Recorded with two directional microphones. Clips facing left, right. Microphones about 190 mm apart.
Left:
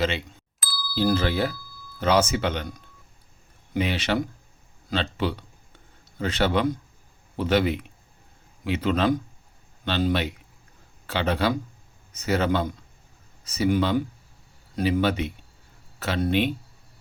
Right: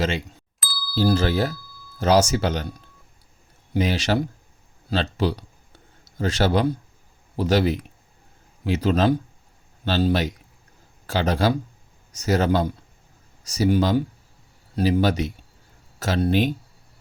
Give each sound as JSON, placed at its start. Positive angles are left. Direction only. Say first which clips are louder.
{"t": 0.6, "sound": "ding", "louder": "left 1 dB", "side_deg": 0}
{"t": 0.9, "sound": "speech", "louder": "right 2 dB", "side_deg": -40}
{"t": 4.9, "sound": "a sound", "louder": "right 3 dB", "side_deg": -40}
{"t": 6.1, "sound": "speech", "louder": "right 2 dB", "side_deg": -40}